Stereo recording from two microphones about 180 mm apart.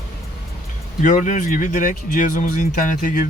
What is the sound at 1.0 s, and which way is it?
Speech, 45° left (ahead or behind).